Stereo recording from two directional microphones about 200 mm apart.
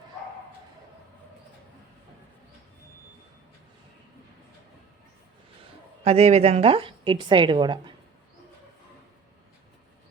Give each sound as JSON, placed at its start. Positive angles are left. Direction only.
{"t": 6.1, "sound": "a woman's voice", "side_deg": -30}